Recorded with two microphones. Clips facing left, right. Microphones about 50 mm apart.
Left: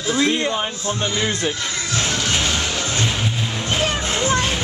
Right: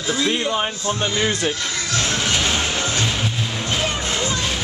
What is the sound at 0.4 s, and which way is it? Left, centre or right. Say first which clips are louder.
Speech: even; centre.